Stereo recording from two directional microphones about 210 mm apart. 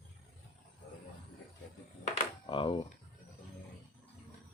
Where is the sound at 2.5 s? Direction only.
25° left (ahead or behind).